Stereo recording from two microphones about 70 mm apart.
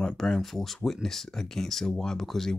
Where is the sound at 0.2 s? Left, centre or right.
Centre.